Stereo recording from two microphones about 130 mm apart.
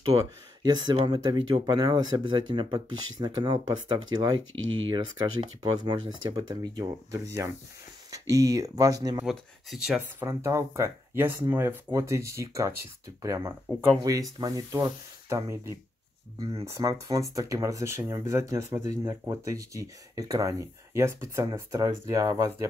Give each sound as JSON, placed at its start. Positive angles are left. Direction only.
{"t": 0.7, "sound": "speech", "side_deg": -30}
{"t": 9.2, "sound": "speech", "side_deg": -5}
{"t": 10.2, "sound": "speech", "side_deg": -25}
{"t": 14.0, "sound": "speech", "side_deg": -30}